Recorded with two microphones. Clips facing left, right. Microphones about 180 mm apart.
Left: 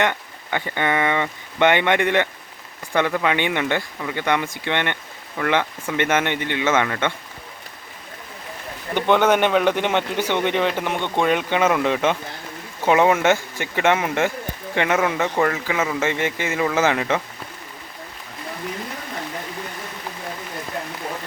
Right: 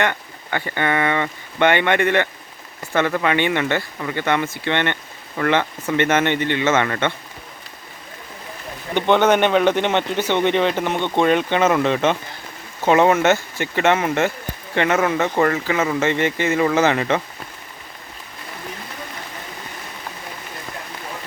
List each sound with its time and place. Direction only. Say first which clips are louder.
0.0 s speech: even; 15° left (ahead or behind)
9.0 s speech: right 2 dB; 5° left (ahead or behind)